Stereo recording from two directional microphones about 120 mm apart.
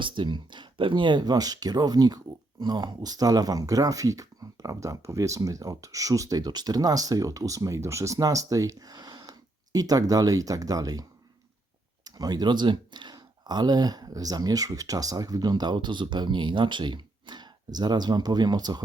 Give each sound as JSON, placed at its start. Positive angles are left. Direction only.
{"t": 0.0, "sound": "speech", "side_deg": -40}
{"t": 12.0, "sound": "speech", "side_deg": -35}